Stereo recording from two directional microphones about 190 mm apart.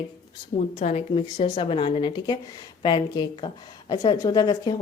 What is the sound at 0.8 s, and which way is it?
Speech, 35° left (ahead or behind).